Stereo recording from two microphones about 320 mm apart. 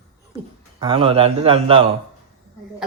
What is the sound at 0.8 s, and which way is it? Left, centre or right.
A man's voice, centre.